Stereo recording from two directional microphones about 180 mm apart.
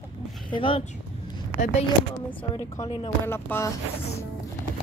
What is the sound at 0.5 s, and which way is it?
Speech, 30° left (ahead or behind).